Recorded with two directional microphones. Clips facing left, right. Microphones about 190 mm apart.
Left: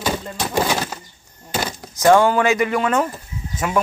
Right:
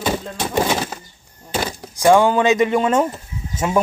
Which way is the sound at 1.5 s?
10° right (ahead or behind).